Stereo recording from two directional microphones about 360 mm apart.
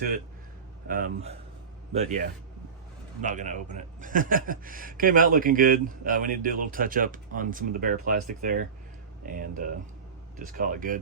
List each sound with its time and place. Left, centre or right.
0.9 s a man's voice: right